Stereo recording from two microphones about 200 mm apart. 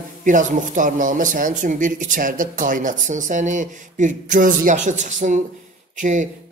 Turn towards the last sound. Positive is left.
turn(degrees=-40)  # may be behind; listen again after turning